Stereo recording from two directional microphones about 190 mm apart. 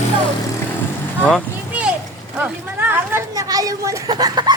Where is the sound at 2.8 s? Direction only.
10° right (ahead or behind).